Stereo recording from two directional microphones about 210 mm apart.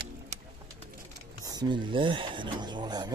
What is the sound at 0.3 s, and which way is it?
Bird, 30° right (ahead or behind).